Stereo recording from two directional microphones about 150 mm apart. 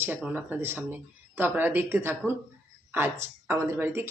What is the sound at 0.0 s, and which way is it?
Speech, 10° right (ahead or behind).